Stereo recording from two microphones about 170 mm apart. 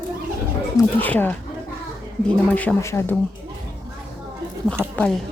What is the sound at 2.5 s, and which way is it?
Speech, 10° left (ahead or behind).